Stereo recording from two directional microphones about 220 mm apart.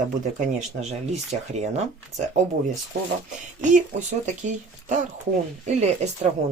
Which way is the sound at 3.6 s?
35° right (ahead or behind).